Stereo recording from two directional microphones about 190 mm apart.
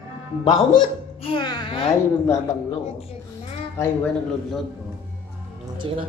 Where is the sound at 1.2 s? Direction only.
25° left (ahead or behind).